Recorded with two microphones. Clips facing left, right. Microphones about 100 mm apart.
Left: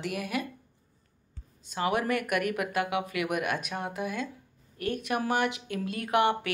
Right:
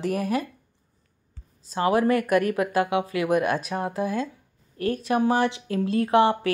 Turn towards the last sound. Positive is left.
turn(degrees=-30)  # may be behind; listen again after turning